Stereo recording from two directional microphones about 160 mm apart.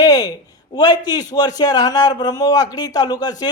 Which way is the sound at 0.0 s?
25° left (ahead or behind).